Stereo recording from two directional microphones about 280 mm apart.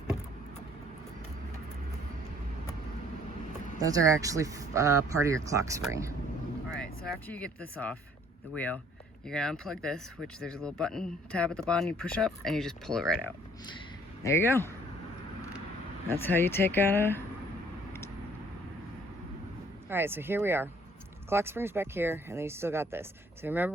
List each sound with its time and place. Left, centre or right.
3.8 s speech: centre
6.7 s speech: centre
14.3 s speech: centre
16.0 s speech: centre
19.9 s speech: centre